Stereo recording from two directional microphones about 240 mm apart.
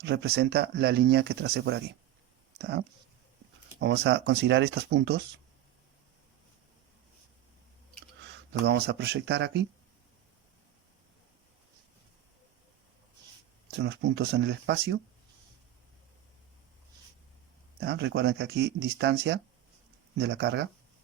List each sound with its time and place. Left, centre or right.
0.0 s speech: right
8.2 s speech: right
13.7 s speech: right
17.7 s speech: right
20.1 s speech: right